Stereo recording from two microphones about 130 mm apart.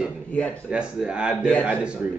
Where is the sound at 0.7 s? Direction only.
10° right (ahead or behind).